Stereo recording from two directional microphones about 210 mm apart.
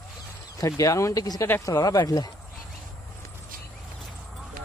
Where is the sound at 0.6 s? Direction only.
15° left (ahead or behind).